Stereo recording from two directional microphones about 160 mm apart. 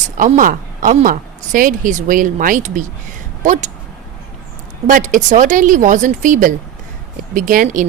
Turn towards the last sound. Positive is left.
turn(degrees=-55)  # may be behind; listen again after turning